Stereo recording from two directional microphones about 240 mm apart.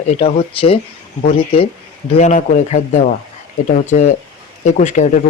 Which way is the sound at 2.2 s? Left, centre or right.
Left.